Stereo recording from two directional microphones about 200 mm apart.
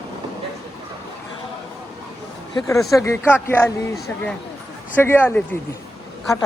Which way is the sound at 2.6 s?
15° left (ahead or behind).